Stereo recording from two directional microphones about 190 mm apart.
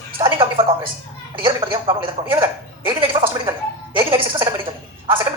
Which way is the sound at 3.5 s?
10° right (ahead or behind).